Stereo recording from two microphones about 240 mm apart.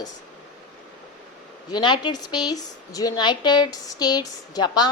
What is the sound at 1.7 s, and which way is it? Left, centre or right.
A woman's voice, centre.